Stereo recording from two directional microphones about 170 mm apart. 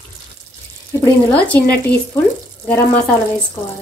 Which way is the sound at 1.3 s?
10° left (ahead or behind).